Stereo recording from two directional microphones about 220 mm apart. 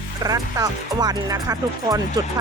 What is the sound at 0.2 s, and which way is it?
Speech, 15° right (ahead or behind).